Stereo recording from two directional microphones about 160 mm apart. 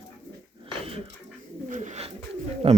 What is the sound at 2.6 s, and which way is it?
Speech, 35° right (ahead or behind).